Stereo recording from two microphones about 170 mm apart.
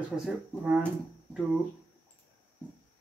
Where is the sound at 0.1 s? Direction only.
5° right (ahead or behind).